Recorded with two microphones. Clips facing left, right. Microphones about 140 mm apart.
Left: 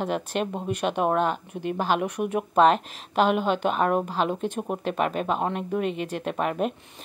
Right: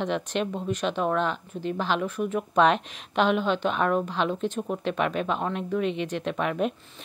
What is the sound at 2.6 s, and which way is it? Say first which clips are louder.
A woman's voice: left 2 dB; 40° left (ahead or behind).